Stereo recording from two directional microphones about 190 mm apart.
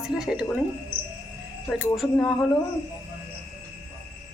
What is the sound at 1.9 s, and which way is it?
Speech, centre (ahead or behind).